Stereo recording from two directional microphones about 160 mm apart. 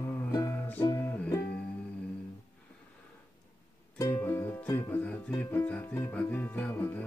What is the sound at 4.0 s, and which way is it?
Music, 15° left (ahead or behind).